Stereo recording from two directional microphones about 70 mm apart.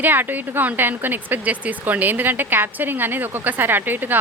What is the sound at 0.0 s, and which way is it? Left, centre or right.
Speech, right.